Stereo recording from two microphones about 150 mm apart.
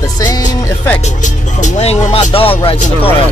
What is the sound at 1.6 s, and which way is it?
Speech, 45° left (ahead or behind).